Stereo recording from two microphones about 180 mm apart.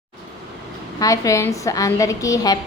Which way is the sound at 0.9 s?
20° left (ahead or behind).